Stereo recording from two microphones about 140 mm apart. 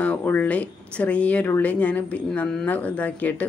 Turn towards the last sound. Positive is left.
turn(degrees=10)  # may be behind; listen again after turning